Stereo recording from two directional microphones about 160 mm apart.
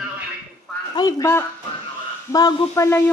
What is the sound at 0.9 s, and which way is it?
A man's voice, 25° left (ahead or behind).